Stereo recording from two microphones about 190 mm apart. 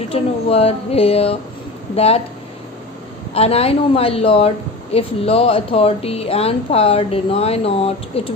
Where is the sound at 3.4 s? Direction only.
30° left (ahead or behind).